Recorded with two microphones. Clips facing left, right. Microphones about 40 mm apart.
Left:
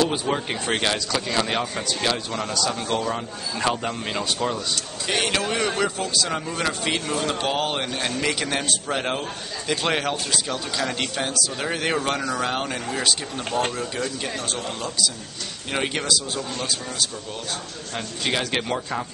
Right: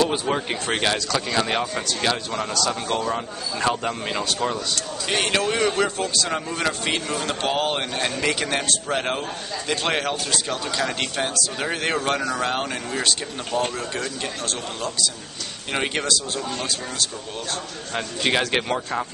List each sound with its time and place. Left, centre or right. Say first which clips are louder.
0.1 s speech: right 1 dB; centre
15.7 s speech: right 1 dB; centre
17.9 s a man's voice: right 3 dB; centre